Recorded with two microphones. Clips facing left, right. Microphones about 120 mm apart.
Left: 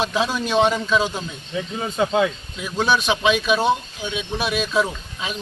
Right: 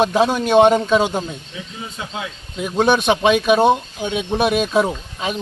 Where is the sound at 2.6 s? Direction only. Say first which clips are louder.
Right 5 dB; 50° right (ahead or behind).